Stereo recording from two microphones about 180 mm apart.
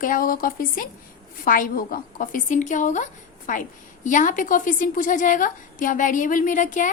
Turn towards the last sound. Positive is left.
turn(degrees=45)  # may be behind; listen again after turning